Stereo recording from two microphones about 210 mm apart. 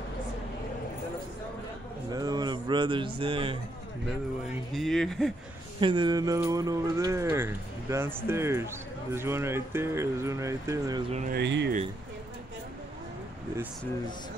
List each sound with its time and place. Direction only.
2.1 s a sound: 20° right (ahead or behind)
4.7 s speech: centre (ahead or behind)
5.8 s speech: 25° right (ahead or behind)
11.1 s speech: 30° right (ahead or behind)
11.3 s speech: 55° right (ahead or behind)